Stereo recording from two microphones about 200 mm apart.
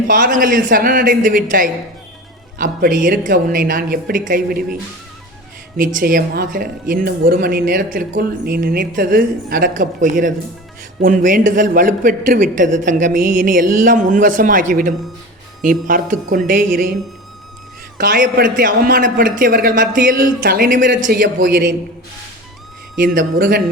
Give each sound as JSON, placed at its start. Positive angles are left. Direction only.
{"t": 0.1, "sound": "a man's voice", "side_deg": -45}
{"t": 17.9, "sound": "speech", "side_deg": -45}
{"t": 23.0, "sound": "speech", "side_deg": -45}